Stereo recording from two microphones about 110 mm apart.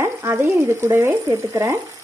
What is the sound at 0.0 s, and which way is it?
Speech, 25° right (ahead or behind).